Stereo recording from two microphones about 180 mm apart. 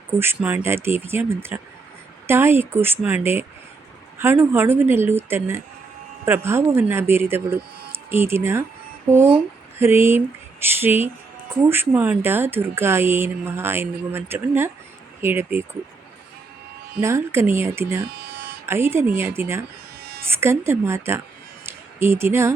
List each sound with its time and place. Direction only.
0.2 s speech: 10° right (ahead or behind)
9.7 s a sound: 15° right (ahead or behind)
11.7 s speech: 10° right (ahead or behind)
17.0 s speech: 15° right (ahead or behind)
18.2 s electric shaver: 65° right (ahead or behind)
18.6 s speech: 15° right (ahead or behind)